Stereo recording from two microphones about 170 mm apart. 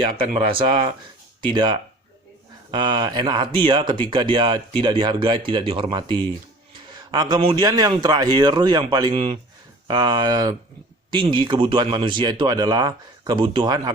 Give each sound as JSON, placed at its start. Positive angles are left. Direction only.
{"t": 0.1, "sound": "speech", "side_deg": -30}